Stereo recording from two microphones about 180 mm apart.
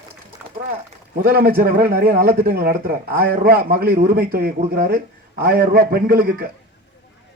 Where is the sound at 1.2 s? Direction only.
55° right (ahead or behind).